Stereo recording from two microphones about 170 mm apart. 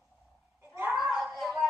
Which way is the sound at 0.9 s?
Centre (ahead or behind).